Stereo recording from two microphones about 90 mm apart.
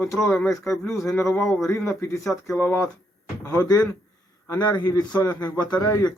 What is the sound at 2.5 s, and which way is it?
Speech, 20° left (ahead or behind).